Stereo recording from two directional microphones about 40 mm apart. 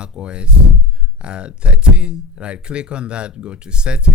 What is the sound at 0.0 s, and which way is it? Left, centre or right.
Speech, right.